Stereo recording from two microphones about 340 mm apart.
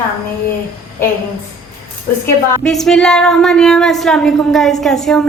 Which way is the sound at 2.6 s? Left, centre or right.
Centre.